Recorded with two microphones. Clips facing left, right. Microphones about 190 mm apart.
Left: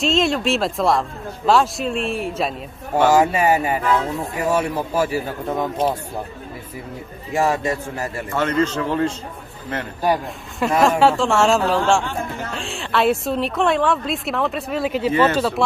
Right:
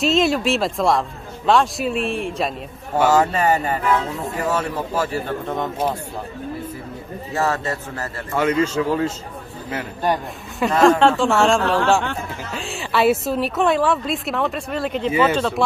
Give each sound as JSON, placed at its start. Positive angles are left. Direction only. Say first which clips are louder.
{"t": 0.0, "sound": "a man's voice", "louder": "right 1 dB", "side_deg": 0}
{"t": 7.3, "sound": "a man's voice", "louder": "left 3 dB", "side_deg": 15}
{"t": 8.4, "sound": "a man's voice", "louder": "right 1 dB", "side_deg": -10}
{"t": 10.0, "sound": "a man's voice", "louder": "left 2 dB", "side_deg": 10}